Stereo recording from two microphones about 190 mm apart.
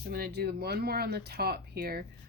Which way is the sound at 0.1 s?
55° right (ahead or behind).